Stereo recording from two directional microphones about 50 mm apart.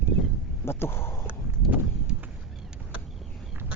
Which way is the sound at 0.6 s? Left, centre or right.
Left.